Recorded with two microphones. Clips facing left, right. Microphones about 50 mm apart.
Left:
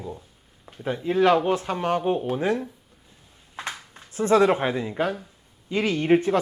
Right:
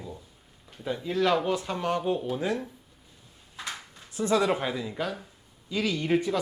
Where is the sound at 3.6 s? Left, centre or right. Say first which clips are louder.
Left 4 dB; left.